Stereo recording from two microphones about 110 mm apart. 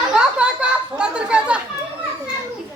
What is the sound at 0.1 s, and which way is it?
Chatter, 10° right (ahead or behind).